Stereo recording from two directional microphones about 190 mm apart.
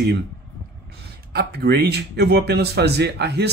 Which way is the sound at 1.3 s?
55° right (ahead or behind).